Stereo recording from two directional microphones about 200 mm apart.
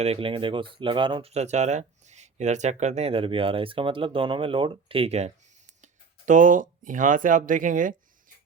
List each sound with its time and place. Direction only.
0.0 s speech: 30° right (ahead or behind)